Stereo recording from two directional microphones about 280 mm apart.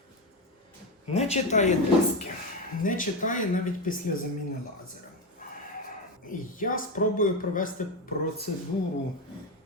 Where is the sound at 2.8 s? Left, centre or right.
Left.